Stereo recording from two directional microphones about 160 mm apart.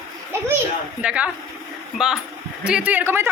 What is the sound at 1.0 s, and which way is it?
Speech, 5° right (ahead or behind).